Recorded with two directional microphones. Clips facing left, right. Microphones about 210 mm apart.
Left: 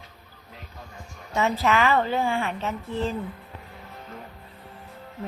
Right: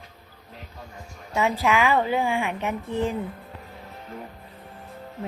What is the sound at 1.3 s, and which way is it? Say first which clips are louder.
A woman's voice: even; 10° right (ahead or behind).